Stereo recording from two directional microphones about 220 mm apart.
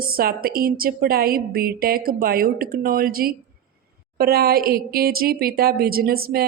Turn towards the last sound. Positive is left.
turn(degrees=-45)  # may be behind; listen again after turning